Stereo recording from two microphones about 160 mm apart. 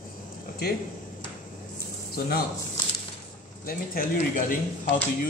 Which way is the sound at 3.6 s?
60° left (ahead or behind).